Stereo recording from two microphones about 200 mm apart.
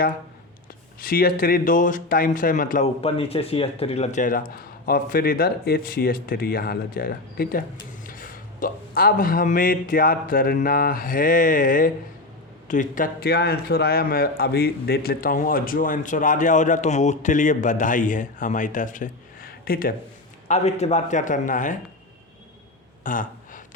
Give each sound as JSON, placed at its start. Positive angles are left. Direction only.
{"t": 0.9, "sound": "a man's voice", "side_deg": 45}
{"t": 20.5, "sound": "a man's voice", "side_deg": 35}
{"t": 23.0, "sound": "a sound", "side_deg": 40}